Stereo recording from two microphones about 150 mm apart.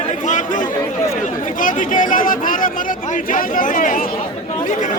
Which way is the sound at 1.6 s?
60° left (ahead or behind).